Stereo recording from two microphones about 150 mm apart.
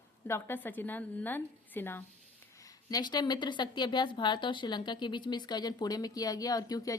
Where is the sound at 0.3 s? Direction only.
15° left (ahead or behind).